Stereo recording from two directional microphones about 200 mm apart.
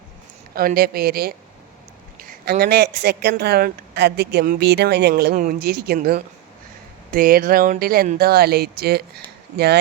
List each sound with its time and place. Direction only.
0.5 s speech: 45° right (ahead or behind)